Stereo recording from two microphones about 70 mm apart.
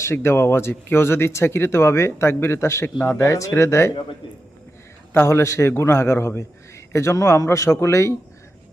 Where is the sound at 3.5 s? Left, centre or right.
Left.